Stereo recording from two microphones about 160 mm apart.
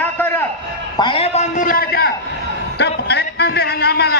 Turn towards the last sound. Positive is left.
turn(degrees=85)